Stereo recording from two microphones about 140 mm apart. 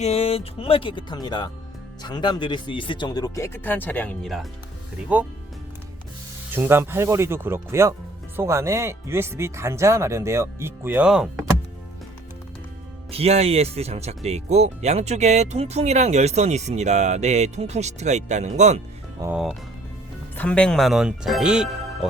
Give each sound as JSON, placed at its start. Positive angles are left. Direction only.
{"t": 0.0, "sound": "speech", "side_deg": 45}
{"t": 5.1, "sound": "speech", "side_deg": -10}
{"t": 6.5, "sound": "speech", "side_deg": -15}
{"t": 13.1, "sound": "speech", "side_deg": -45}
{"t": 19.2, "sound": "speech", "side_deg": -25}
{"t": 20.3, "sound": "speech", "side_deg": 10}